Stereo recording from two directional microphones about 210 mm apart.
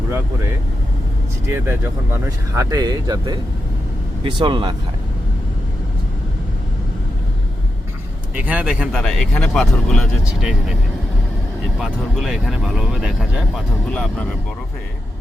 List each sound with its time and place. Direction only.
1.5 s speech: 10° right (ahead or behind)
8.4 s speech: 5° right (ahead or behind)
11.8 s speech: centre (ahead or behind)